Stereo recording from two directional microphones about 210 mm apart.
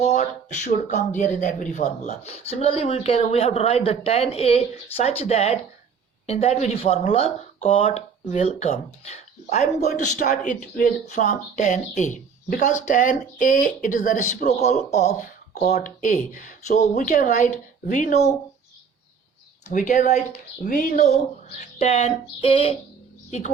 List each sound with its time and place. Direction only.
0.0 s speech: 35° left (ahead or behind)
19.7 s speech: 35° left (ahead or behind)